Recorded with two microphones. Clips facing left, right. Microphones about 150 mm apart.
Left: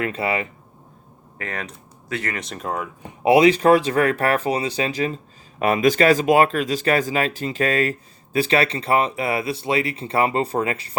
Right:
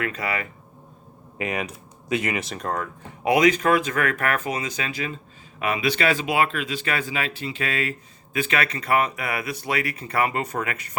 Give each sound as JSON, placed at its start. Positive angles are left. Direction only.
{"t": 0.0, "sound": "speech", "side_deg": 25}
{"t": 1.4, "sound": "speech", "side_deg": -10}
{"t": 2.4, "sound": "speech", "side_deg": 0}
{"t": 3.2, "sound": "speech", "side_deg": 30}